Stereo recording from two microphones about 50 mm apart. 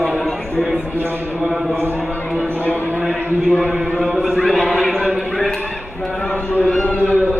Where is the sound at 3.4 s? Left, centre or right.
Centre.